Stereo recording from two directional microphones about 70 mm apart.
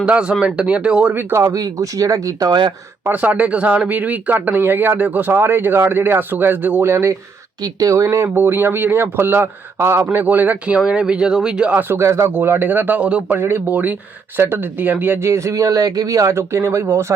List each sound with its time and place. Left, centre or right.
0.0 s speech: centre
1.3 s speech: right
3.1 s speech: right
7.6 s speech: right
8.0 s speech: right
8.3 s speech: right
10.8 s speech: centre
11.7 s speech: right
12.0 s speech: right
12.3 s speech: right
15.2 s speech: right
16.3 s speech: right